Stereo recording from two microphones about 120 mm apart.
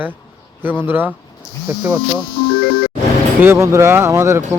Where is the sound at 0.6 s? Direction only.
15° right (ahead or behind).